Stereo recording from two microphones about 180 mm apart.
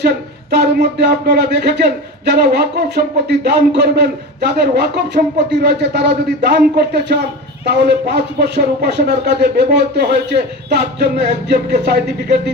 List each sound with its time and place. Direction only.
0.5 s speech: 65° right (ahead or behind)